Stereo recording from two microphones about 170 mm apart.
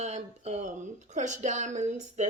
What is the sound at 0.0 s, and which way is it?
Speech, 40° right (ahead or behind).